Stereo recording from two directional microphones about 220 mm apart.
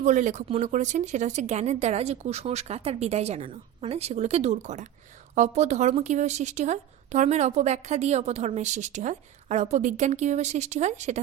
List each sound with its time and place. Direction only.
0.0 s a woman's voice: 35° right (ahead or behind)